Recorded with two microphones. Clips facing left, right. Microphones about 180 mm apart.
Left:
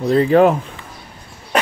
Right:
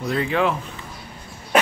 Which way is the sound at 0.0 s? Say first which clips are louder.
Left 9 dB; 35° left (ahead or behind).